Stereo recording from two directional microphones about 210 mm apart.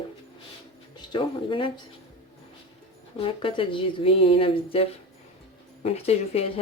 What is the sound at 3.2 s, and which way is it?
Speech, 25° left (ahead or behind).